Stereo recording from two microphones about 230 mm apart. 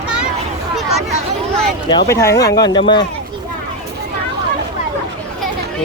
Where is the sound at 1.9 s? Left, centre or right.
Centre.